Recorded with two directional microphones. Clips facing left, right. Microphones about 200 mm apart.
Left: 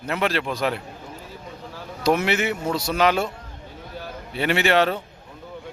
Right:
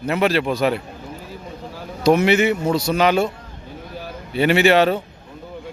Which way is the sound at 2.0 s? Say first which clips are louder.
Right 6 dB; centre (ahead or behind).